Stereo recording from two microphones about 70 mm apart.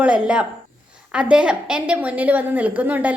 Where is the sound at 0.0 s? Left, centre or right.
Centre.